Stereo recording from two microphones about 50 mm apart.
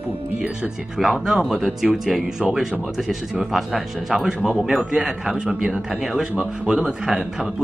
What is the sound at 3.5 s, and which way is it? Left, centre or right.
A man's voice, centre.